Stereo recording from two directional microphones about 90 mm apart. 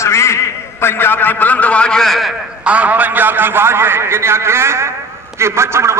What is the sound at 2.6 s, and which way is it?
A man's voice, 15° right (ahead or behind).